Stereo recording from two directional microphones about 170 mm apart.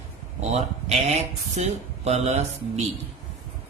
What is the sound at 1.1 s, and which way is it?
Speech, 40° right (ahead or behind).